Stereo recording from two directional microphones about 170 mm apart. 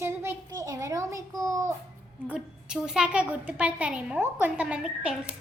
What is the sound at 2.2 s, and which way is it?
A woman's voice, 5° right (ahead or behind).